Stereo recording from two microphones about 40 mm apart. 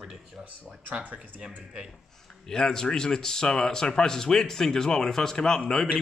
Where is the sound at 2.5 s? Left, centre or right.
Centre.